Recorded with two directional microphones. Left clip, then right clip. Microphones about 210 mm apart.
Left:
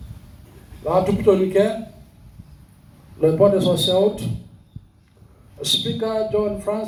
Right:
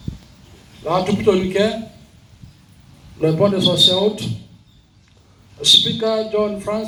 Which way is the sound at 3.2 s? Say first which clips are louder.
Left 1 dB; 50° left (ahead or behind).